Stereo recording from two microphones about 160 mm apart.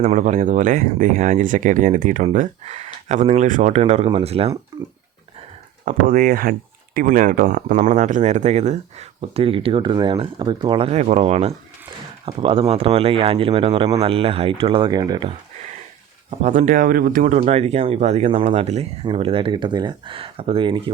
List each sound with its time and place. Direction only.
0.1 s speech: 50° right (ahead or behind)
5.8 s speech: 55° right (ahead or behind); by 15.3 s 25° right (ahead or behind)
16.4 s speech: 50° right (ahead or behind); by 20.9 s 30° right (ahead or behind)